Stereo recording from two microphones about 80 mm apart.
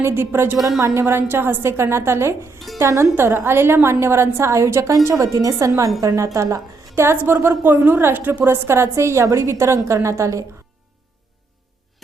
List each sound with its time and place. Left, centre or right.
0.0 s a woman's voice: right
6.9 s a woman's voice: right